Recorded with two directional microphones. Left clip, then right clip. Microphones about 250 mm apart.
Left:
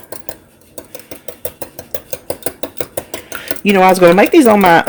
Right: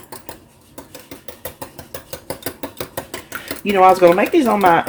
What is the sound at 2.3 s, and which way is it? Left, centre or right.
Dishes, centre.